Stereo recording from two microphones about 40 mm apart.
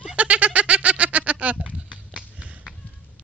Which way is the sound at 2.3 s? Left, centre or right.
Right.